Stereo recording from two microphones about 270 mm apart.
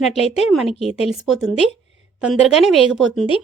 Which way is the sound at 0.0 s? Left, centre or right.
Centre.